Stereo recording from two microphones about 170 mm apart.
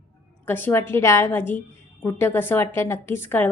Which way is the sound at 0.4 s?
10° left (ahead or behind).